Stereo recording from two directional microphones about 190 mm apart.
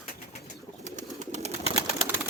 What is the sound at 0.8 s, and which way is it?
Bird, 40° right (ahead or behind).